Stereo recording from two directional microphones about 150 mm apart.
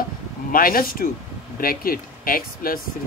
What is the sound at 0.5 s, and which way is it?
Speech, 70° left (ahead or behind).